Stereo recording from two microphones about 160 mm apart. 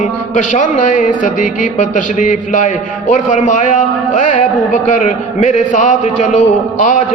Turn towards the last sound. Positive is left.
turn(degrees=50)  # may be behind; listen again after turning